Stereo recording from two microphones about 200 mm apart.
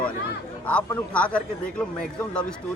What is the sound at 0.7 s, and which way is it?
A man's voice, 5° left (ahead or behind).